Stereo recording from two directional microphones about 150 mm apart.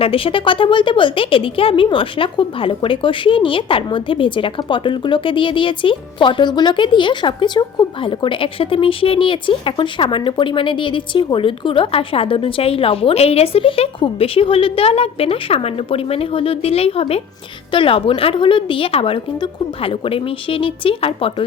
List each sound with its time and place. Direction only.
0.0 s a woman's voice: 35° left (ahead or behind)